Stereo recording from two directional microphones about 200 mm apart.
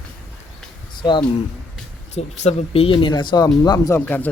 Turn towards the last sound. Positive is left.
turn(degrees=10)  # may be behind; listen again after turning